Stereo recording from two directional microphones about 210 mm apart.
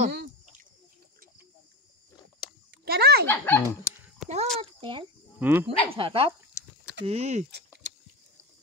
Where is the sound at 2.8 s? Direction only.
50° right (ahead or behind).